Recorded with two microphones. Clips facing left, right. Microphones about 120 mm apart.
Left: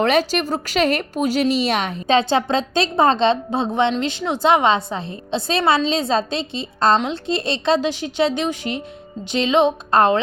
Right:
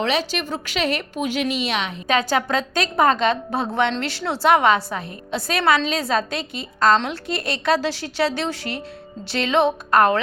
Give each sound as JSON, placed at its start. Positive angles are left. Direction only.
{"t": 0.0, "sound": "a woman's voice", "side_deg": 45}
{"t": 2.0, "sound": "a woman's voice", "side_deg": 25}